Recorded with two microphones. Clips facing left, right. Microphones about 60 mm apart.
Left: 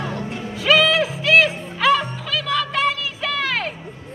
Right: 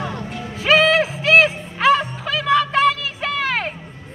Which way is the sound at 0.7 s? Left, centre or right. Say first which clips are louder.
Right 2 dB; right.